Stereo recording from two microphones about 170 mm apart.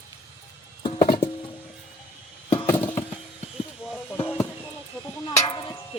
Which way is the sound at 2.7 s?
10° left (ahead or behind).